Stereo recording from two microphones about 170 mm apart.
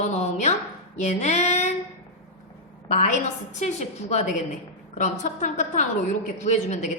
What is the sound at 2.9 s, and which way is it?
A woman's voice, 45° left (ahead or behind).